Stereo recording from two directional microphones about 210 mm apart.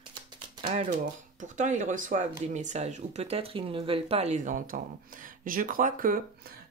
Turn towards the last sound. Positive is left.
turn(degrees=-40)  # may be behind; listen again after turning